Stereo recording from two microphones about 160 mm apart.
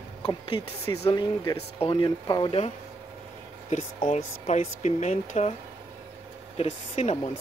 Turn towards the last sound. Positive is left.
turn(degrees=45)  # may be behind; listen again after turning